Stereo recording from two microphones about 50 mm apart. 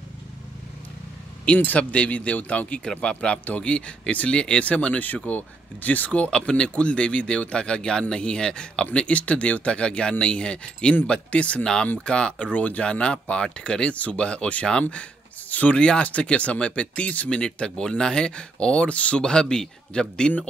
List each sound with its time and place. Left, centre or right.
1.6 s speech: left
2.8 s speech: centre
6.3 s speech: centre